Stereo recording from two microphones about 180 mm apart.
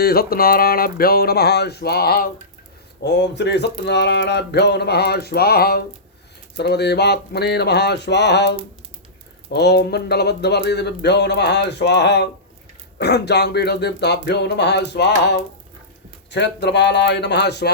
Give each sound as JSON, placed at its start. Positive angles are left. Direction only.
{"t": 0.0, "sound": "speech", "side_deg": 60}
{"t": 3.0, "sound": "speech", "side_deg": 70}